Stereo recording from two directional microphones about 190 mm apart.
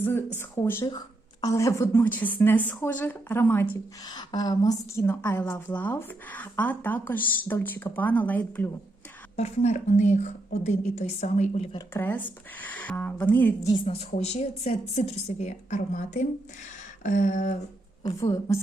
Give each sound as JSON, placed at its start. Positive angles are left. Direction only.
{"t": 0.3, "sound": "a woman's voice", "side_deg": 15}
{"t": 9.3, "sound": "a woman's voice", "side_deg": 35}
{"t": 11.9, "sound": "a woman's voice", "side_deg": 10}
{"t": 13.8, "sound": "a woman's voice", "side_deg": 35}